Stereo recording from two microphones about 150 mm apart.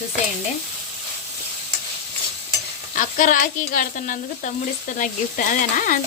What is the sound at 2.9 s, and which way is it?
Sizzle, 60° left (ahead or behind).